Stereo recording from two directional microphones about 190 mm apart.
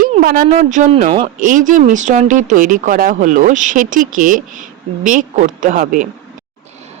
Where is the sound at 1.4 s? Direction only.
45° right (ahead or behind).